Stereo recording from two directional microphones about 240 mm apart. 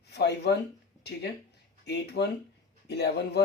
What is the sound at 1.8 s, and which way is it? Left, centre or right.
Speech, left.